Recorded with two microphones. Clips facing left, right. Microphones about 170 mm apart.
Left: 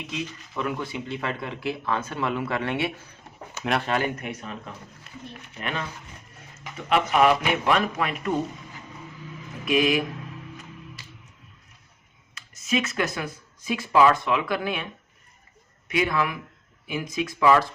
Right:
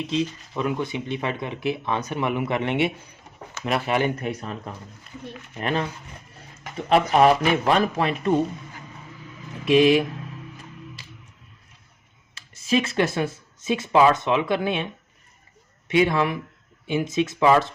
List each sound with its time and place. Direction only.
0.1 s speech: 25° right (ahead or behind)
3.6 s speech: centre (ahead or behind)
4.0 s speech: 35° right (ahead or behind)
5.5 s speech: 35° right (ahead or behind)
9.6 s speech: 30° right (ahead or behind)
12.3 s speech: 30° right (ahead or behind)
15.9 s speech: 25° right (ahead or behind)